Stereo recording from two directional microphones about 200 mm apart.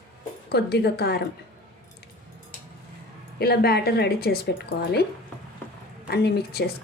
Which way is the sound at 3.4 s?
50° left (ahead or behind).